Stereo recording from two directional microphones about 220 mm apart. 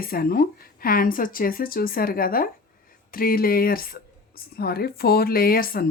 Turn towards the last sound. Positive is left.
turn(degrees=40)  # may be behind; listen again after turning